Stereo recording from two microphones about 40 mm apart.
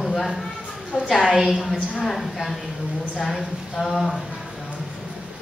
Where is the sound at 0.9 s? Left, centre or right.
Centre.